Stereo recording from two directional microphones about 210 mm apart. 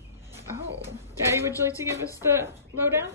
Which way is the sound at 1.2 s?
10° right (ahead or behind).